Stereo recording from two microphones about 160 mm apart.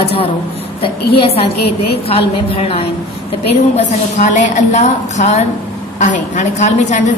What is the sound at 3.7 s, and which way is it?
A woman's voice, 45° left (ahead or behind).